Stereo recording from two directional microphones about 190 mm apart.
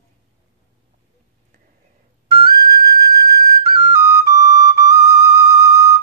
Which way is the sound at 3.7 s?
15° right (ahead or behind).